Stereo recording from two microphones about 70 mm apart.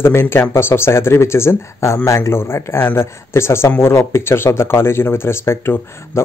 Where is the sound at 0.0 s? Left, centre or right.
Left.